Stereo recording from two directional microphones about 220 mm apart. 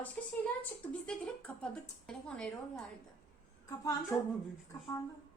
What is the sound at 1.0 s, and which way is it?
A woman's voice, 5° left (ahead or behind).